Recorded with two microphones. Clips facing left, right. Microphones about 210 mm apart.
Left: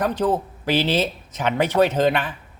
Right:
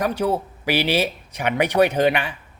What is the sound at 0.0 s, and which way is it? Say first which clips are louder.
A man's voice: left 1 dB; 10° right (ahead or behind).